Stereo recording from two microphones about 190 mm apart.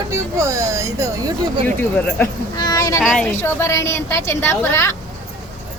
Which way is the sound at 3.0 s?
5° left (ahead or behind).